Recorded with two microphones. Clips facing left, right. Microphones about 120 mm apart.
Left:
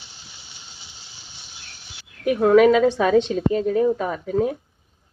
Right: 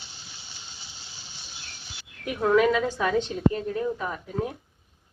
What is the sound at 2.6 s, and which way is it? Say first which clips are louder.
A woman's voice: left 8 dB; 70° left (ahead or behind).